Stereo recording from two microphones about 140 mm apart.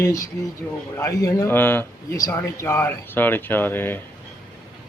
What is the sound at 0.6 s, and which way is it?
A man's voice, 10° left (ahead or behind).